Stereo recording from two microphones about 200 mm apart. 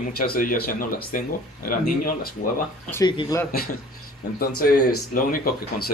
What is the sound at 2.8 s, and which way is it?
Speech, 15° left (ahead or behind).